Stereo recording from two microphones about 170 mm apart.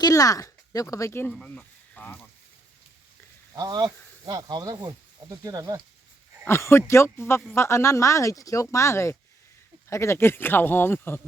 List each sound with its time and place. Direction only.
0.0 s speech: 20° left (ahead or behind)
1.3 s speech: 5° left (ahead or behind)
3.5 s speech: 20° right (ahead or behind)
6.4 s speech: 15° left (ahead or behind)